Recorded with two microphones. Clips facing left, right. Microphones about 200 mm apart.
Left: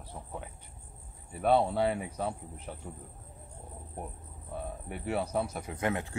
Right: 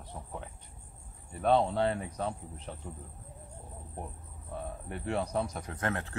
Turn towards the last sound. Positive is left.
turn(degrees=10)  # may be behind; listen again after turning